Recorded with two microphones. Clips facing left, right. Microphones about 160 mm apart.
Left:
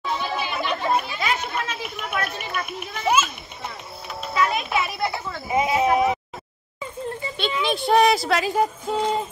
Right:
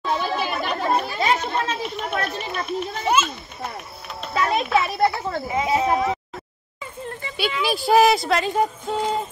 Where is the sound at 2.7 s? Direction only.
10° left (ahead or behind).